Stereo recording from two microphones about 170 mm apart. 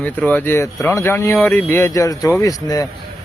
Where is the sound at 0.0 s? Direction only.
10° left (ahead or behind).